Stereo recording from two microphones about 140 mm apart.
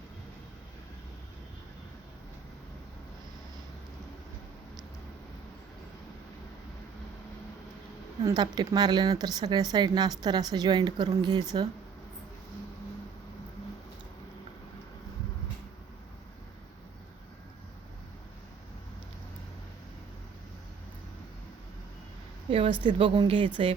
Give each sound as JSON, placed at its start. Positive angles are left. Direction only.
{"t": 8.2, "sound": "speech", "side_deg": -30}
{"t": 22.4, "sound": "a sound", "side_deg": -40}
{"t": 22.8, "sound": "a woman's voice", "side_deg": -40}